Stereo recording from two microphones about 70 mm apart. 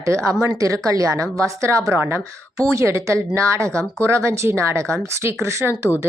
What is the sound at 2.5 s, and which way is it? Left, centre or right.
A woman's voice, right.